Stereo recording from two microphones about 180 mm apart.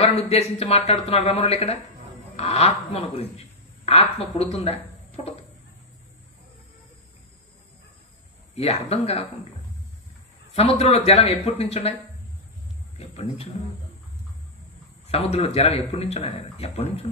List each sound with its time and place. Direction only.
0.0 s speech: 35° left (ahead or behind)
8.5 s speech: 35° left (ahead or behind)
10.5 s speech: 35° left (ahead or behind)
12.9 s speech: 35° left (ahead or behind)
15.0 s speech: 35° left (ahead or behind)